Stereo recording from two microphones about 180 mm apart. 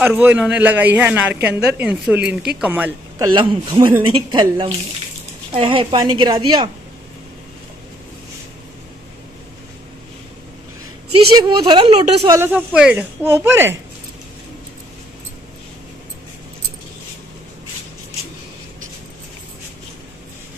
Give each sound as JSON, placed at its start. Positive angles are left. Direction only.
{"t": 0.0, "sound": "speech", "side_deg": -10}
{"t": 3.3, "sound": "a woman's voice", "side_deg": -25}
{"t": 11.1, "sound": "a woman's voice", "side_deg": -30}
{"t": 12.3, "sound": "speech", "side_deg": -10}